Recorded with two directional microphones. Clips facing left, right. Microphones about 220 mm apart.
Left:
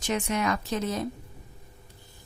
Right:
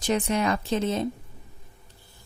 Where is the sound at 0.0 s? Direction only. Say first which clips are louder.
Right 3 dB; 35° right (ahead or behind).